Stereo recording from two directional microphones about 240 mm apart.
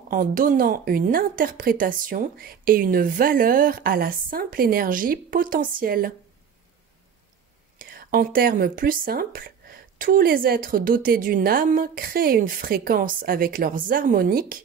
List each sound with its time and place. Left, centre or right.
0.1 s speech: right
7.8 s speech: right